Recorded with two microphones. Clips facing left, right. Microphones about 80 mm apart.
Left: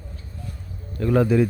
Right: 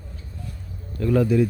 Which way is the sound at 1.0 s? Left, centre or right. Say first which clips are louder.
Left 1 dB; left.